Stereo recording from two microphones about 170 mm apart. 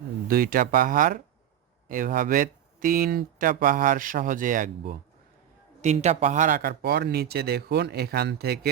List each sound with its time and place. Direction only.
0.3 s speech: 60° right (ahead or behind)